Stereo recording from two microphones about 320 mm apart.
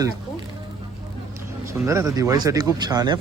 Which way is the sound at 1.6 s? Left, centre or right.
Centre.